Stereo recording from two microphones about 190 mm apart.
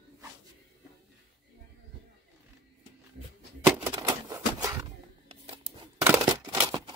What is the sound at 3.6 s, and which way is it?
Typewriter, 15° right (ahead or behind).